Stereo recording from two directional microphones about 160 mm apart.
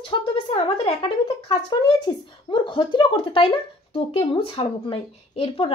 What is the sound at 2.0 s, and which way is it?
A woman's voice, 30° left (ahead or behind).